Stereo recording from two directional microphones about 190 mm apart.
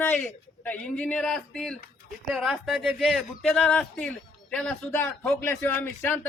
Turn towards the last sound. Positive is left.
turn(degrees=10)  # may be behind; listen again after turning